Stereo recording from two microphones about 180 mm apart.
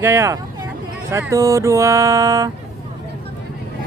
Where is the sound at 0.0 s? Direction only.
15° right (ahead or behind).